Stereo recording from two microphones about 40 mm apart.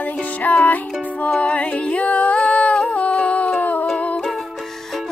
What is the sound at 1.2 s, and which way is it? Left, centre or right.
Music, left.